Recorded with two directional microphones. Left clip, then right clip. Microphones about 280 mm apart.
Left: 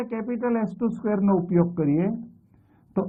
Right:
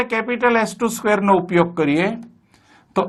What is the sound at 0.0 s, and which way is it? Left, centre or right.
Speech, centre.